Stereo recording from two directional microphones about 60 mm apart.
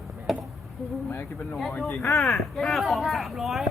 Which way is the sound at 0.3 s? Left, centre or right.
Centre.